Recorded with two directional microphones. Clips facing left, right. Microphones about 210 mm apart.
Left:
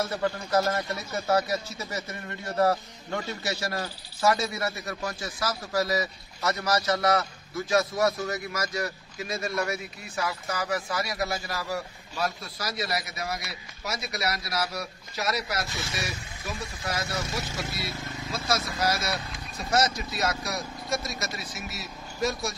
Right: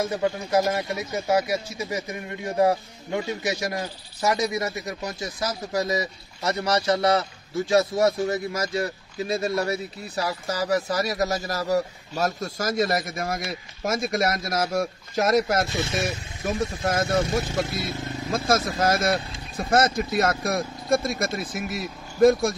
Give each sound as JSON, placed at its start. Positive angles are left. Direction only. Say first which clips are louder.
{"t": 0.0, "sound": "speech", "louder": "right 4 dB", "side_deg": -15}